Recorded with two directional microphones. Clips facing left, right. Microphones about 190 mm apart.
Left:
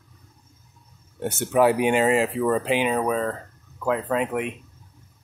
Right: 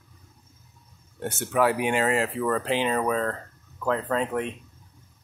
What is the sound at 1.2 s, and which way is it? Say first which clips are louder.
Speech: left 4 dB; 20° left (ahead or behind).